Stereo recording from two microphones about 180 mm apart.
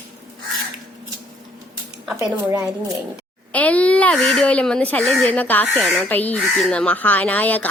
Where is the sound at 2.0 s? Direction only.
5° right (ahead or behind).